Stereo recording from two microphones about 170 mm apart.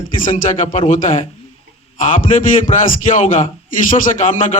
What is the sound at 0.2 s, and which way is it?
A man's voice, 50° left (ahead or behind).